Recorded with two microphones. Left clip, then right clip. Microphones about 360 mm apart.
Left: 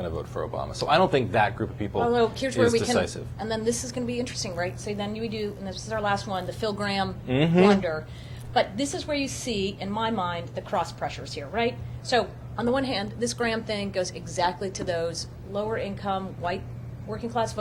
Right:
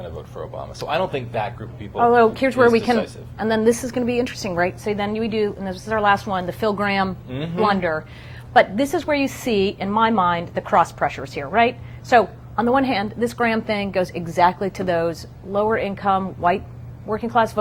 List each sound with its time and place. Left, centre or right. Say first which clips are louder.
0.0 s speech: left 1 dB; left
2.0 s a woman's voice: right 9 dB; right
7.3 s speech: left 6 dB; left
7.7 s a woman's voice: right 3 dB; right